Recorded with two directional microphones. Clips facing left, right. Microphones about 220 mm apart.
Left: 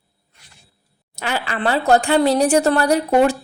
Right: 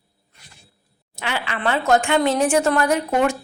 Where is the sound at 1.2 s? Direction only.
40° left (ahead or behind).